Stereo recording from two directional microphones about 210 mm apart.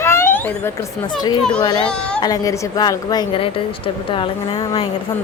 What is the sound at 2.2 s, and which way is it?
A woman's voice, 15° left (ahead or behind).